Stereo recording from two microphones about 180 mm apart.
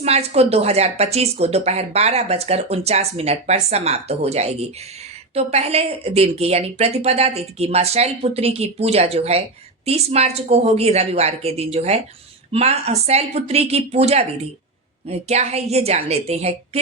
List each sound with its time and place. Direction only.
0.0 s speech: 35° right (ahead or behind)